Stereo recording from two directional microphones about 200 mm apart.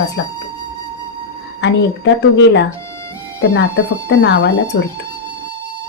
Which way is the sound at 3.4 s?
85° left.